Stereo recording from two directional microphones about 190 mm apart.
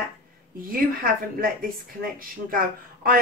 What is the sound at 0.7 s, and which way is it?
A woman's voice, 50° right (ahead or behind).